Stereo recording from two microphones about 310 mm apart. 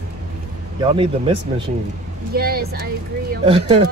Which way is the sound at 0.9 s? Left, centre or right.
Centre.